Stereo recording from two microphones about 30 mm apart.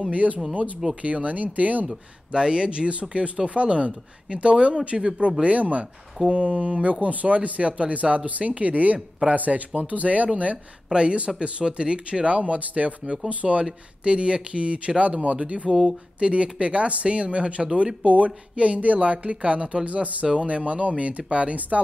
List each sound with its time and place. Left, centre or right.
0.1 s speech: right
2.3 s speech: right
5.4 s speech: right
10.9 s speech: right
14.0 s speech: right
18.0 s speech: right
20.3 s speech: right